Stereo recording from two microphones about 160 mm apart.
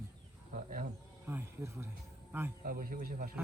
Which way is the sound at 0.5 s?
60° right (ahead or behind).